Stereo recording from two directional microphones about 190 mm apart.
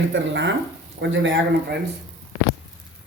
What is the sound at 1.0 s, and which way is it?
Speech, 85° right.